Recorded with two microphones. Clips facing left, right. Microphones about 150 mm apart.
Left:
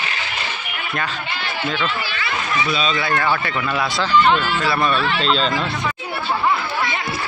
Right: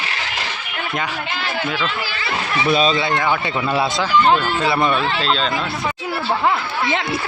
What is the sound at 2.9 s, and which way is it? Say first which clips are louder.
Speech: right 1 dB; 25° right (ahead or behind).